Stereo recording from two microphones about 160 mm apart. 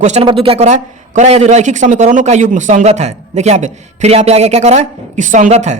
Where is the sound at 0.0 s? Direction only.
45° right (ahead or behind).